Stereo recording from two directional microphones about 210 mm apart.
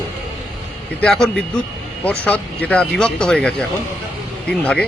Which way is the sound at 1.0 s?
5° left (ahead or behind).